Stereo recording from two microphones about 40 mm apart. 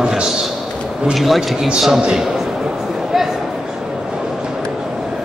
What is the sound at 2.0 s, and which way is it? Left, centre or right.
Speech, centre.